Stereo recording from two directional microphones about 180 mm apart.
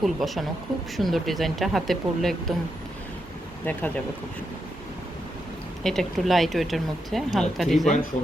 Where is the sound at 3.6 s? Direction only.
10° left (ahead or behind).